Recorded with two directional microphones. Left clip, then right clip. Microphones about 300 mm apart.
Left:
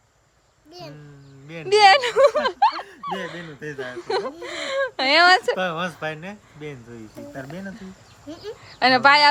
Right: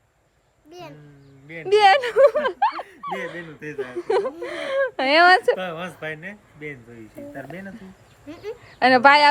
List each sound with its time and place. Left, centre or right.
1.6 s a sound: centre
3.2 s speech: centre
5.5 s speech: centre
8.3 s speech: centre